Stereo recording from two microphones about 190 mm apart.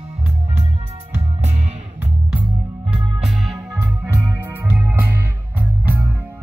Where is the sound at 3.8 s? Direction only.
10° right (ahead or behind).